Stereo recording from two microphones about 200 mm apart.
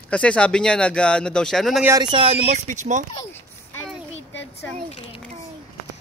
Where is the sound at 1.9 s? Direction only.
20° right (ahead or behind); by 3.1 s 40° right (ahead or behind).